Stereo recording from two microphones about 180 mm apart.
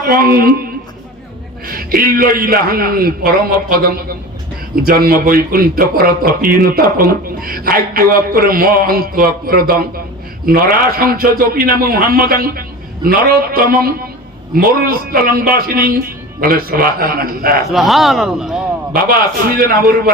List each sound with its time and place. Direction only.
0.1 s a man's voice: 55° right (ahead or behind)
1.6 s a man's voice: 55° right (ahead or behind)
17.7 s speech: centre (ahead or behind)
19.5 s a man's voice: 55° right (ahead or behind)